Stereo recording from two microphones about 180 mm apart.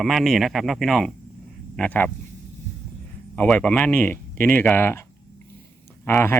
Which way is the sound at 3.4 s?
5° left (ahead or behind).